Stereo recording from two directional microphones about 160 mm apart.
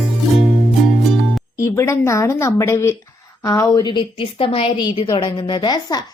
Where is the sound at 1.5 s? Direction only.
20° left (ahead or behind).